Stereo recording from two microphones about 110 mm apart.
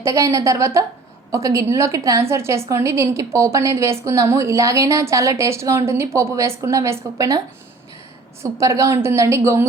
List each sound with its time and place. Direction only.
0.0 s a woman's voice: 30° right (ahead or behind)